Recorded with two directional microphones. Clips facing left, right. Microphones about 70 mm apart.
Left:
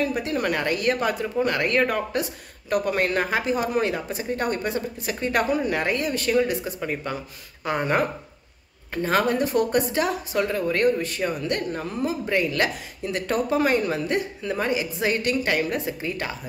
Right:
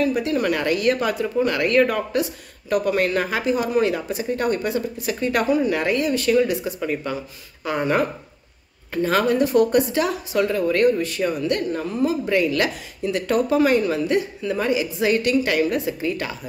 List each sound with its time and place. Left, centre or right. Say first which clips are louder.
0.0 s speech: right 4 dB; left